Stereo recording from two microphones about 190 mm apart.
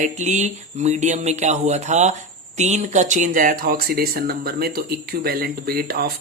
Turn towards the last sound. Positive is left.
turn(degrees=-50)  # may be behind; listen again after turning